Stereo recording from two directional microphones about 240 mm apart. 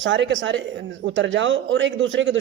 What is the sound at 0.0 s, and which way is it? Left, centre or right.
A man's voice, right.